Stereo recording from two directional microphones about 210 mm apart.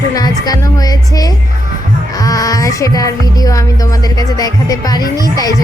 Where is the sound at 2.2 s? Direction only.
15° left (ahead or behind).